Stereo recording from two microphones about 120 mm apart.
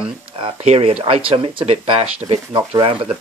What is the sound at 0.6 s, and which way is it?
Speech, 55° right (ahead or behind).